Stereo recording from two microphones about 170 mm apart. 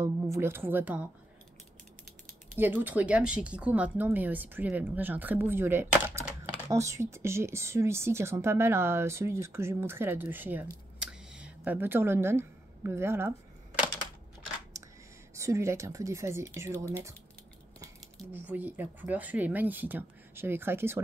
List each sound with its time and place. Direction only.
0.0 s speech: 15° right (ahead or behind)
2.5 s speech: 10° right (ahead or behind)
14.7 s a sound: 20° right (ahead or behind)
15.3 s speech: 15° right (ahead or behind)
18.3 s speech: 10° right (ahead or behind)